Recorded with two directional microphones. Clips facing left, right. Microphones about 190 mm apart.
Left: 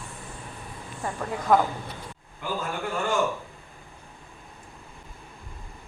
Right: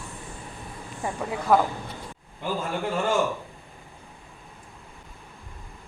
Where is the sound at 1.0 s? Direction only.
10° right (ahead or behind).